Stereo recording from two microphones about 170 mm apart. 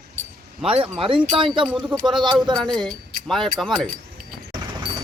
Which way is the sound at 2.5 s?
5° left (ahead or behind).